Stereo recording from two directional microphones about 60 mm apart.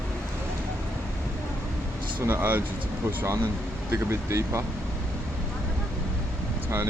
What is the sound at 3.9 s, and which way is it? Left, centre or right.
Speech, right.